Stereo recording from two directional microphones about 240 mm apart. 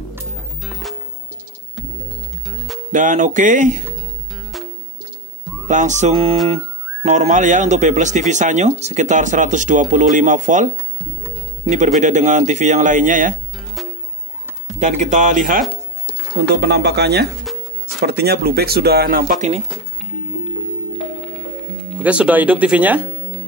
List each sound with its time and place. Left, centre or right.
2.5 s music: centre
2.9 s speech: right
5.7 s fowl: right
6.5 s speech: right
12.0 s speech: right
14.8 s speech: right
16.3 s speech: right
21.9 s speech: centre